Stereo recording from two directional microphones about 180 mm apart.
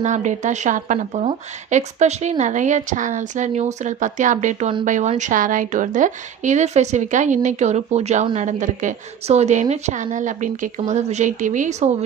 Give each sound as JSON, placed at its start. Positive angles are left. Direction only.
{"t": 0.0, "sound": "speech", "side_deg": -45}